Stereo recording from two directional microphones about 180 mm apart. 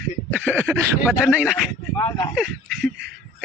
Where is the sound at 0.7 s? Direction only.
5° right (ahead or behind).